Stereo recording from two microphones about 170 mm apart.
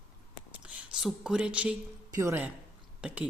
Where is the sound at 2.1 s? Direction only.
20° right (ahead or behind).